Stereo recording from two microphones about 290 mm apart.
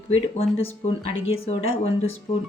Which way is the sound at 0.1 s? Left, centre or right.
Left.